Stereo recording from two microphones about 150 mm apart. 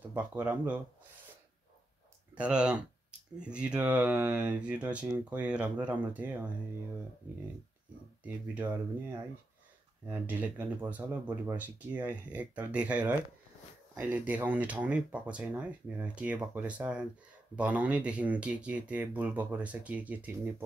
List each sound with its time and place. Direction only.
0.1 s speech: 10° right (ahead or behind)
2.3 s speech: 5° right (ahead or behind)
8.2 s speech: 10° right (ahead or behind)
10.0 s speech: 10° right (ahead or behind)